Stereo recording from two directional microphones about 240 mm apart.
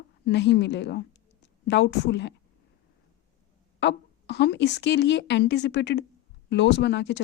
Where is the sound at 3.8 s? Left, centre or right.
Left.